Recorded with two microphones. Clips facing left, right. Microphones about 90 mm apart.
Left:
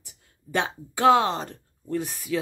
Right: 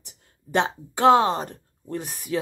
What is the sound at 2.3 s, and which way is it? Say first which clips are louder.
Speech: right 1 dB; 35° right (ahead or behind).